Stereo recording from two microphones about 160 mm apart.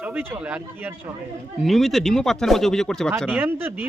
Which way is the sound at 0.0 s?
10° right (ahead or behind).